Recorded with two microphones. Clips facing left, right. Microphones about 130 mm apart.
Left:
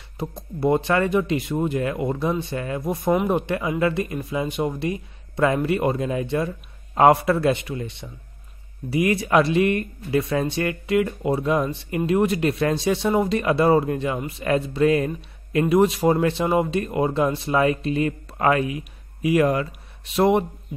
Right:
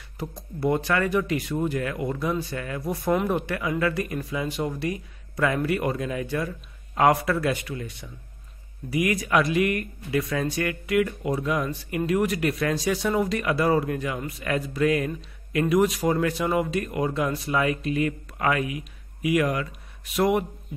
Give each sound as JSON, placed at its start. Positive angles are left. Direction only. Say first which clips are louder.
{"t": 0.4, "sound": "speech", "louder": "left 4 dB", "side_deg": 25}